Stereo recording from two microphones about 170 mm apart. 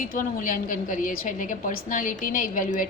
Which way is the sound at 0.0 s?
50° left (ahead or behind).